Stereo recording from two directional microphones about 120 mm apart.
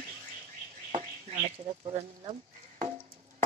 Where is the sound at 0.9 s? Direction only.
65° right (ahead or behind).